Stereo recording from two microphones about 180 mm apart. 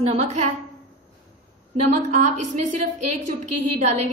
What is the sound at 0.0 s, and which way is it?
Speech, 35° right (ahead or behind).